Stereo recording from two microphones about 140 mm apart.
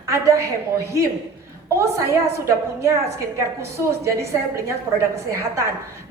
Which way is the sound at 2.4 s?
20° right (ahead or behind).